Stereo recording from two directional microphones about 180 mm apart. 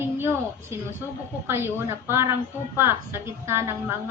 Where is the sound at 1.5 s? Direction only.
15° right (ahead or behind).